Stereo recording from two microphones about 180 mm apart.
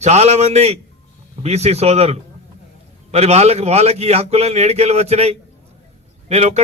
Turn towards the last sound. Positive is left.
turn(degrees=-35)  # may be behind; listen again after turning